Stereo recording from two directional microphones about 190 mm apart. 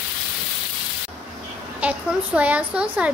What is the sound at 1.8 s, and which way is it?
A woman's voice, 5° right (ahead or behind).